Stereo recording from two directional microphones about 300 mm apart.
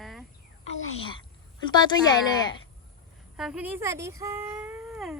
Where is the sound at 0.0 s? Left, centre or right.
Centre.